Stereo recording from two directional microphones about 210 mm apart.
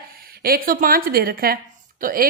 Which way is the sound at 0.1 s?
45° right (ahead or behind).